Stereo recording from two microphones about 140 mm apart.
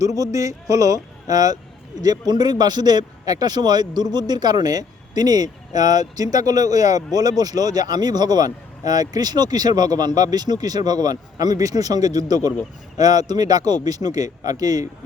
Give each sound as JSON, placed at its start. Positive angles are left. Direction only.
{"t": 0.0, "sound": "speech", "side_deg": -25}